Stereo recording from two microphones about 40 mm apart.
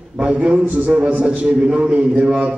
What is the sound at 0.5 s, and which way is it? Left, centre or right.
A man's voice, right.